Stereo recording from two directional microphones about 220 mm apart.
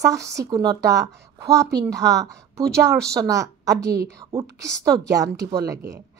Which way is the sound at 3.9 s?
45° right (ahead or behind).